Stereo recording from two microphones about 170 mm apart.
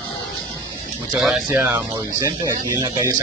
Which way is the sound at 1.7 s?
20° right (ahead or behind).